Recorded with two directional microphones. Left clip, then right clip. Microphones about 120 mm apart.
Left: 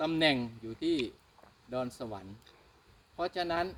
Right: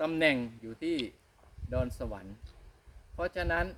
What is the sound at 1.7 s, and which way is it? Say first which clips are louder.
Speech: right 1 dB; 20° right (ahead or behind).